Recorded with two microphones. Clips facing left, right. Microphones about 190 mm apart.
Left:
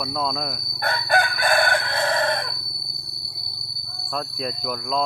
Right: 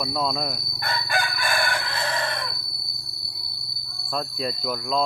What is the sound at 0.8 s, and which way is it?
Crowing, 55° left (ahead or behind).